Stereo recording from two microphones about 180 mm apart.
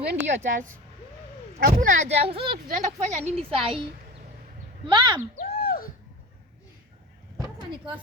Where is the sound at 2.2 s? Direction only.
30° right (ahead or behind).